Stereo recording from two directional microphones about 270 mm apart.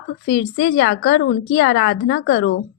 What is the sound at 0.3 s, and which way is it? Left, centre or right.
Speech, left.